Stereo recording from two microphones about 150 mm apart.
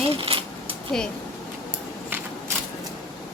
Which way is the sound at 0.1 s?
35° right (ahead or behind).